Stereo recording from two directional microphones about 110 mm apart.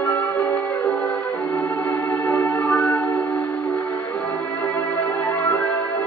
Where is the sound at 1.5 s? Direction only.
25° left (ahead or behind).